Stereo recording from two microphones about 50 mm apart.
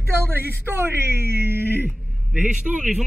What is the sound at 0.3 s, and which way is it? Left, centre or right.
Speech, right.